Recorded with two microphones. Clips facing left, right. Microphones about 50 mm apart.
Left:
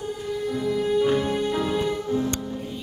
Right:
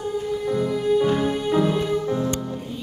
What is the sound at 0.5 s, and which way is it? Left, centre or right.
Music, centre.